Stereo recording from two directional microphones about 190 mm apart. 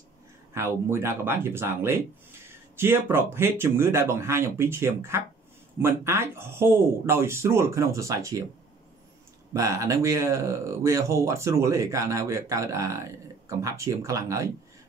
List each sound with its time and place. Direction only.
0.6 s speech: 15° right (ahead or behind)
9.5 s speech: 15° right (ahead or behind)